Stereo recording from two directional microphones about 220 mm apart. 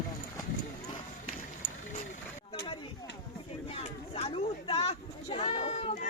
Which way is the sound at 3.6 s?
30° left (ahead or behind).